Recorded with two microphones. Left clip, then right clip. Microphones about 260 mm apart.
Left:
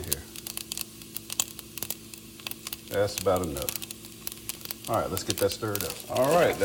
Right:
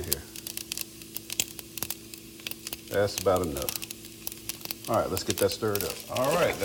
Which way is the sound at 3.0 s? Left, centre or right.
Right.